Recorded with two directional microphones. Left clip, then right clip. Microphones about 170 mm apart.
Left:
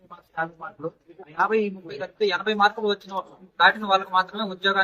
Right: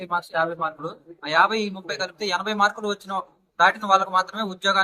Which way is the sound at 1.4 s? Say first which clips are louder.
Even; 15° right (ahead or behind).